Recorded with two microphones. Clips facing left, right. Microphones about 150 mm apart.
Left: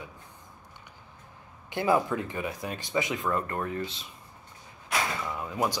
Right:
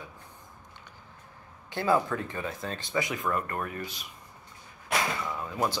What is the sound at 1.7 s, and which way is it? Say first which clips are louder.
Speech: left 1 dB; 20° left (ahead or behind).